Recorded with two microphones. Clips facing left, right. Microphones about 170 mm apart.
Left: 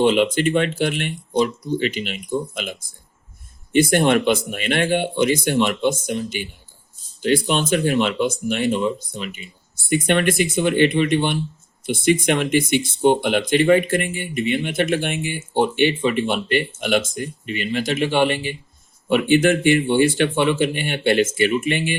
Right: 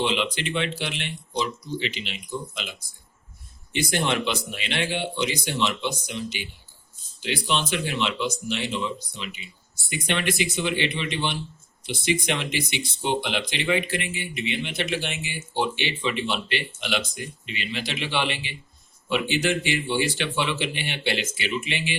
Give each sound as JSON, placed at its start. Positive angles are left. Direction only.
{"t": 0.0, "sound": "speech", "side_deg": 45}